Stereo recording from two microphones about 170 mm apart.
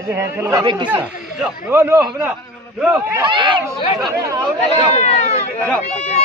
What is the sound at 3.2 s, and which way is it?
Speech, 30° right (ahead or behind).